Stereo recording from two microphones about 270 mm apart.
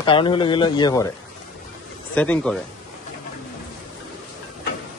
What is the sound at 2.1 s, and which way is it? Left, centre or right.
Speech, centre.